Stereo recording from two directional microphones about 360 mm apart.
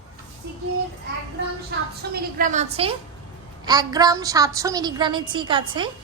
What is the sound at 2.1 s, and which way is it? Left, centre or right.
A woman's voice, right.